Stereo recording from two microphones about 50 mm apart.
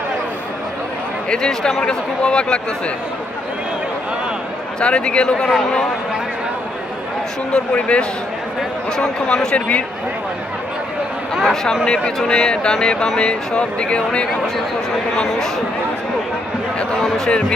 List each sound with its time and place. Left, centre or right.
1.3 s speech: centre
4.8 s speech: left
5.5 s speech: centre
7.7 s speech: left
9.0 s speech: centre
9.6 s speech: left
11.9 s speech: centre
15.3 s speech: centre
17.0 s speech: centre